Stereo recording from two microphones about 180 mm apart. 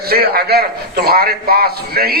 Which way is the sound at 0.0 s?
55° right (ahead or behind).